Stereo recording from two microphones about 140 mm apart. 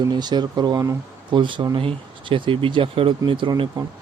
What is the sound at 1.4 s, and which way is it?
Speech, 35° right (ahead or behind).